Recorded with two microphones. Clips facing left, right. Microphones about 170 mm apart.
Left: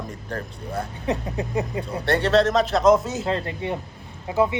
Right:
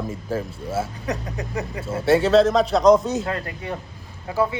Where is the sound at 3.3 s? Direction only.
25° left (ahead or behind).